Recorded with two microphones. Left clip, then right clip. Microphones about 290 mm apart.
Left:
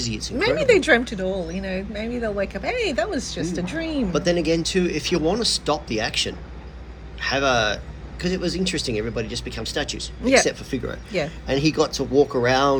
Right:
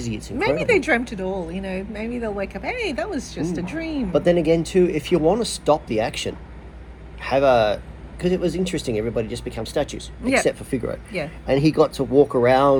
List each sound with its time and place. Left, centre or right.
0.0 s speech: centre
0.3 s a woman's voice: centre
4.1 s a man's voice: centre